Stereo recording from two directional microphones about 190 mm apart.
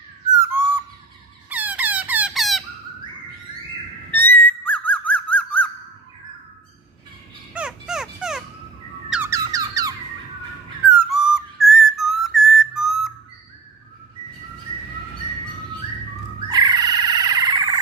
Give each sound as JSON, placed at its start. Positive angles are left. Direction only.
{"t": 0.4, "sound": "a sound", "side_deg": -10}
{"t": 1.5, "sound": "squeak", "side_deg": -10}
{"t": 4.1, "sound": "whistle", "side_deg": 10}
{"t": 7.5, "sound": "music", "side_deg": -5}
{"t": 9.1, "sound": "squeak", "side_deg": -15}
{"t": 11.1, "sound": "whistle", "side_deg": 0}
{"t": 16.4, "sound": "frog", "side_deg": -20}